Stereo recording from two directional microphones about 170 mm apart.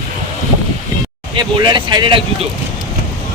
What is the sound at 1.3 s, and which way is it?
Speech, 25° right (ahead or behind).